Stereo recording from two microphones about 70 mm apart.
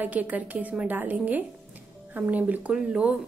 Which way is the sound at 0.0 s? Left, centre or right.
Right.